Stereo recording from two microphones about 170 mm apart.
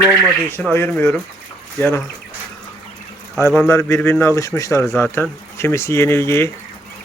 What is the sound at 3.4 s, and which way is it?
A man's voice, 15° left (ahead or behind).